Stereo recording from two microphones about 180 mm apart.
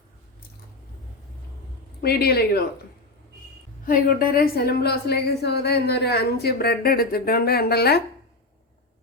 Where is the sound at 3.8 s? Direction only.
50° left (ahead or behind).